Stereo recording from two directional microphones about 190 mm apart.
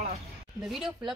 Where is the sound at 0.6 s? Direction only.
5° right (ahead or behind).